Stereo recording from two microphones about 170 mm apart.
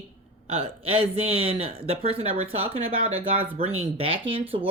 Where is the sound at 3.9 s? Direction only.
35° right (ahead or behind).